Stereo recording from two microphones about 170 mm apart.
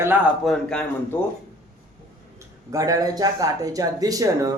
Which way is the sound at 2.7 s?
20° right (ahead or behind).